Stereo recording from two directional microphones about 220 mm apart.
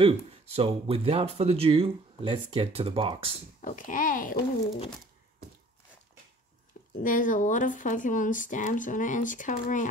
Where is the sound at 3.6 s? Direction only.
35° left (ahead or behind).